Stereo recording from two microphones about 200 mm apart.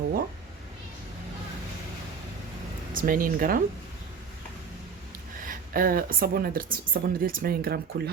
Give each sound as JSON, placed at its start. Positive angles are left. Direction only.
{"t": 2.9, "sound": "speech", "side_deg": -45}
{"t": 5.5, "sound": "speech", "side_deg": -45}